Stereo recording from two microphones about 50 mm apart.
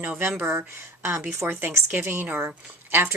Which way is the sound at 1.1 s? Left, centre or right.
Right.